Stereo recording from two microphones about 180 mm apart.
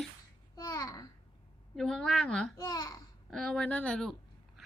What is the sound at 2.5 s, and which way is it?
Babbling, 20° left (ahead or behind).